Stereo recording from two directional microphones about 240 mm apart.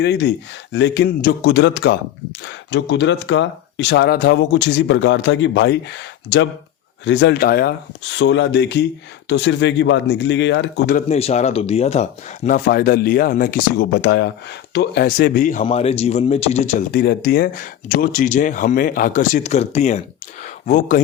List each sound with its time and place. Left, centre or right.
0.0 s speech: left
7.0 s speech: left
15.6 s speech: left